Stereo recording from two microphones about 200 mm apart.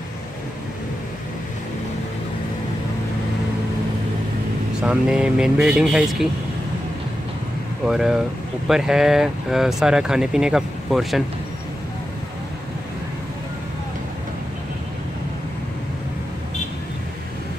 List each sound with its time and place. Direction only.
4.8 s speech: 5° right (ahead or behind)
7.8 s speech: centre (ahead or behind)